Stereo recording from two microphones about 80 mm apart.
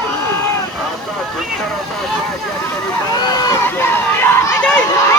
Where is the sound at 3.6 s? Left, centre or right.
Left.